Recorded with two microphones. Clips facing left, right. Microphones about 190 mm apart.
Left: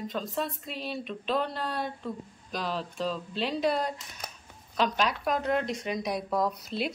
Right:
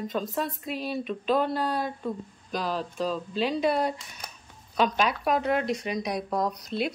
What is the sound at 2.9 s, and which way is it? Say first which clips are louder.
Speech: right 3 dB; 45° right (ahead or behind).